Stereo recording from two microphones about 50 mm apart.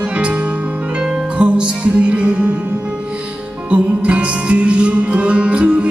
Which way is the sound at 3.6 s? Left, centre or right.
Right.